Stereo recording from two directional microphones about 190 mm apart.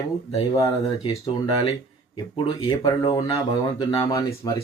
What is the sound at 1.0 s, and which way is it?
Speech, 30° left (ahead or behind).